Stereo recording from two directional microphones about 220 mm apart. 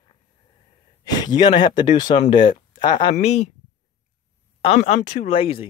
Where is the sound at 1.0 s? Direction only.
20° left (ahead or behind).